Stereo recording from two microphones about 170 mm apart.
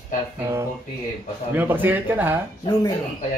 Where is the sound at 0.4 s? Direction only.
15° right (ahead or behind).